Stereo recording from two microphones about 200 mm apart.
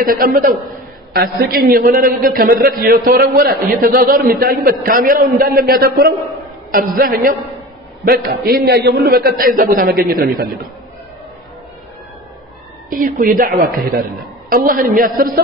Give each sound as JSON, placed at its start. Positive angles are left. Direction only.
{"t": 0.0, "sound": "a man's voice", "side_deg": -45}
{"t": 12.9, "sound": "a man's voice", "side_deg": -45}